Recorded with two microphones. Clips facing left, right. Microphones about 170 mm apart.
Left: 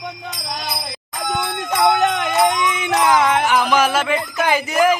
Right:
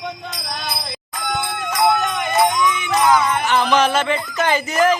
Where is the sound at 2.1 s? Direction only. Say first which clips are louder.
Even; 80° left.